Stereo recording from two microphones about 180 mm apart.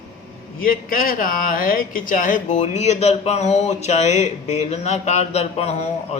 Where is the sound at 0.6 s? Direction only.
50° left (ahead or behind).